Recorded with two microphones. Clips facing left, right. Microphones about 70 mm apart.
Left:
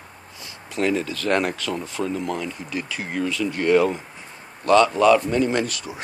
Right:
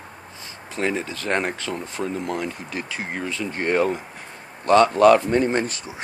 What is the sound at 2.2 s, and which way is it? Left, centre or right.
Speech, right.